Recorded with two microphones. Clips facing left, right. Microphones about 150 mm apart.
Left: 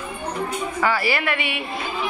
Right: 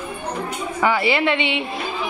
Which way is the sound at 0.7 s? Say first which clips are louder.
Right 4 dB; 20° right (ahead or behind).